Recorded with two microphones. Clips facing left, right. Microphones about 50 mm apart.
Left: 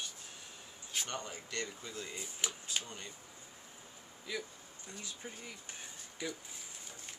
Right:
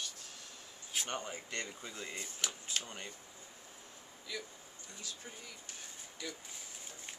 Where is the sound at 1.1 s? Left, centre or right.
Right.